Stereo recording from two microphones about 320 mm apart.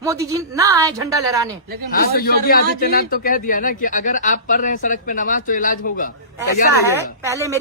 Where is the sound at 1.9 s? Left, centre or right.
Left.